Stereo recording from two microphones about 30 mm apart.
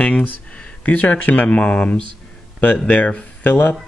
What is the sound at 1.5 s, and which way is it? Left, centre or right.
Speech, left.